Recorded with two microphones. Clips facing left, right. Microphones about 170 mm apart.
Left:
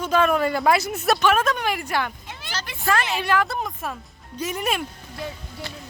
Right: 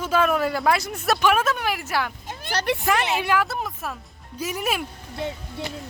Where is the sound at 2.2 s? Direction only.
55° right (ahead or behind).